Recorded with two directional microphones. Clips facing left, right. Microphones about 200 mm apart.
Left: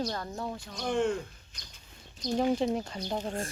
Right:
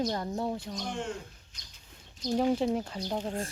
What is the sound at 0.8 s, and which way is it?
Speech, 60° left (ahead or behind).